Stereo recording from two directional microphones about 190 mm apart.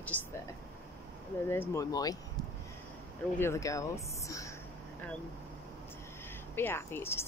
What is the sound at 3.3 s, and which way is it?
Speech, 15° left (ahead or behind).